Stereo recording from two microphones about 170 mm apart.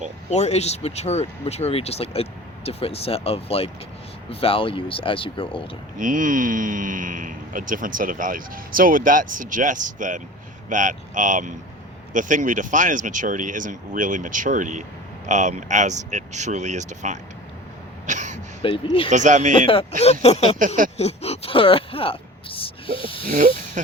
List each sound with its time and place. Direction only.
0.3 s speech: 40° left (ahead or behind)
6.0 s speech: 50° right (ahead or behind)
18.0 s throat clearing: 45° right (ahead or behind)
18.6 s speech: 30° left (ahead or behind)
19.1 s speech: 45° right (ahead or behind)
19.5 s speech: 30° left (ahead or behind)
23.3 s speech: 45° right (ahead or behind)